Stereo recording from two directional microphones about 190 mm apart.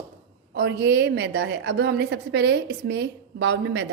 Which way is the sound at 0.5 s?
60° right (ahead or behind).